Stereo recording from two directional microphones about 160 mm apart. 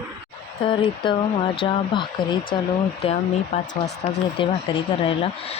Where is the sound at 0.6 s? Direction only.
30° left (ahead or behind).